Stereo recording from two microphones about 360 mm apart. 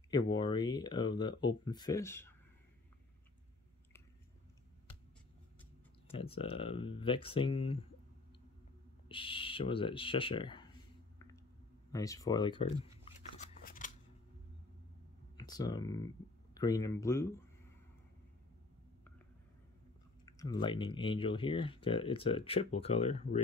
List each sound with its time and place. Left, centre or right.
0.1 s speech: centre
5.6 s speech: centre
9.1 s speech: centre
11.9 s speech: centre
13.0 s scissors: left
15.3 s speech: centre
20.2 s speech: centre